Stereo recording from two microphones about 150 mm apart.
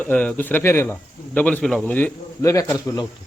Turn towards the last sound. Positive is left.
turn(degrees=20)  # may be behind; listen again after turning